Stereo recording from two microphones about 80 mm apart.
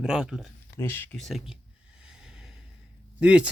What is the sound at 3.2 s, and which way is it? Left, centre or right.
Speech, centre.